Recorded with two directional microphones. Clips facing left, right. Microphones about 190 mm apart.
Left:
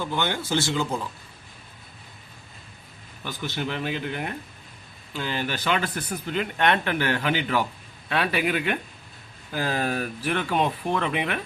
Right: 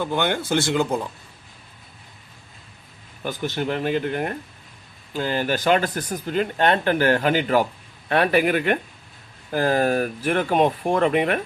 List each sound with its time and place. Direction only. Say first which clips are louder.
0.0 s speech: right 4 dB; 55° right (ahead or behind)
3.2 s speech: right 5 dB; 45° right (ahead or behind)